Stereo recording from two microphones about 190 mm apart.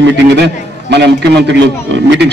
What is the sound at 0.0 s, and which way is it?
A man's voice, 60° right (ahead or behind).